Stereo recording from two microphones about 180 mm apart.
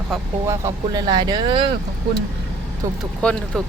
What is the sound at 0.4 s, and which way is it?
Speech, 15° right (ahead or behind).